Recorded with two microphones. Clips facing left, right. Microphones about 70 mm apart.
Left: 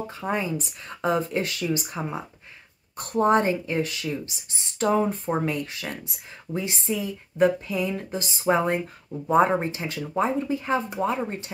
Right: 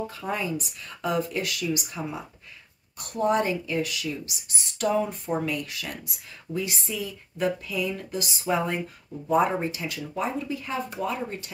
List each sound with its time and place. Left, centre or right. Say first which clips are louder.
0.1 s speech: left 2 dB; left